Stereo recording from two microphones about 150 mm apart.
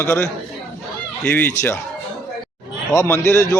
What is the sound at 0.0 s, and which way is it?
A man's voice, 20° left (ahead or behind).